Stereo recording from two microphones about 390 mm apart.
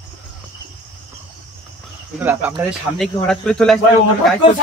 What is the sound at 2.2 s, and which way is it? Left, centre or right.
Speech, centre.